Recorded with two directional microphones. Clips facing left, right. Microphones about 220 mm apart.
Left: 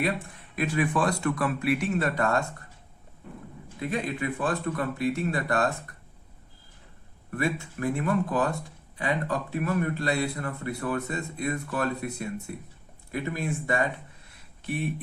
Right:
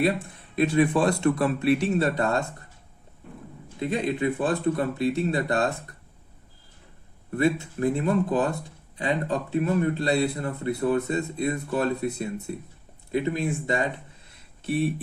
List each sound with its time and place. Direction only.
0.5 s a man's voice: 25° right (ahead or behind)
3.8 s a man's voice: 30° right (ahead or behind)
7.3 s a man's voice: 25° right (ahead or behind)